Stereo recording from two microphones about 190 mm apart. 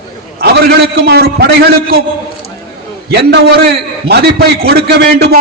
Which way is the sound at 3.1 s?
60° right (ahead or behind).